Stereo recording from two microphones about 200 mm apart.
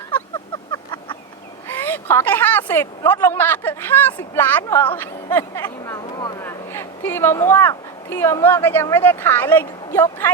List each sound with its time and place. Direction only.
1.6 s a woman's voice: 10° left (ahead or behind)